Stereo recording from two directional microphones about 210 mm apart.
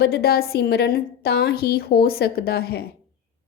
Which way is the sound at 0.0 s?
50° left (ahead or behind).